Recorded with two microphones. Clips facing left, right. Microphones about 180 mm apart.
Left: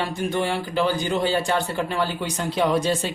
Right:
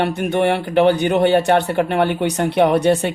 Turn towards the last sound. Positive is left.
turn(degrees=-65)  # may be behind; listen again after turning